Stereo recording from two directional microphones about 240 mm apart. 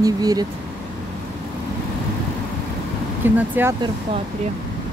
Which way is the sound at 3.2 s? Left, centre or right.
Centre.